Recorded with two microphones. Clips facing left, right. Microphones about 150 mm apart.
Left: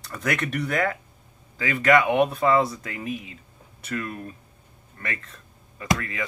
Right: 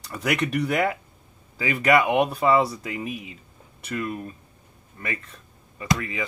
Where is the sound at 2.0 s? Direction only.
5° right (ahead or behind).